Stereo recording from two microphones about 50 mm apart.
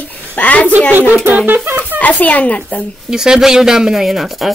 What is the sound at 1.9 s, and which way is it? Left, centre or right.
Speech, left.